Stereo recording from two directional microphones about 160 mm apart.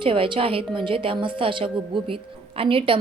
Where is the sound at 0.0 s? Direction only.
35° right (ahead or behind).